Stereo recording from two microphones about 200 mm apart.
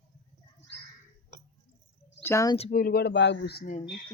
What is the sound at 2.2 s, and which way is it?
Speech, 15° left (ahead or behind).